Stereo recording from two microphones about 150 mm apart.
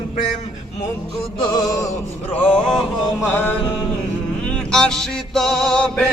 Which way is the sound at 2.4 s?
10° left (ahead or behind).